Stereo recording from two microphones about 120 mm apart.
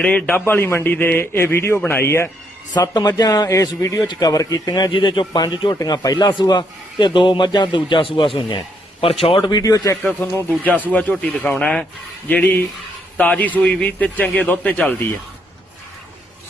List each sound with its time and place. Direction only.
0.0 s a man's voice: 10° left (ahead or behind)
2.7 s a man's voice: 35° left (ahead or behind)
10.2 s a man's voice: 15° left (ahead or behind)